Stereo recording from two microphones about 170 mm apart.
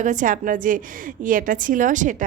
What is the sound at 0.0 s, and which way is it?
Speech, 50° right (ahead or behind).